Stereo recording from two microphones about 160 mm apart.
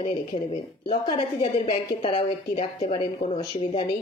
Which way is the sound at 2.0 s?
35° left (ahead or behind).